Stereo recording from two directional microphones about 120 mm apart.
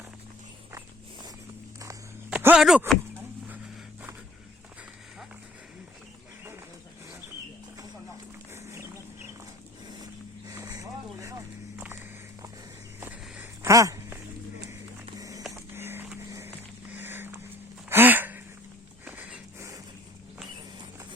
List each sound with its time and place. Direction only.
2.3 s a sound: 15° right (ahead or behind)
2.6 s speech: 5° right (ahead or behind)
8.5 s chicken: 20° right (ahead or behind)
10.5 s vehicle: 25° right (ahead or behind)
13.0 s walk: 15° right (ahead or behind)
13.6 s a sound: 25° right (ahead or behind)
15.2 s printer: 30° right (ahead or behind)
15.5 s printer: 20° right (ahead or behind)
16.3 s vehicle: 20° right (ahead or behind)
17.8 s a sound: 15° right (ahead or behind)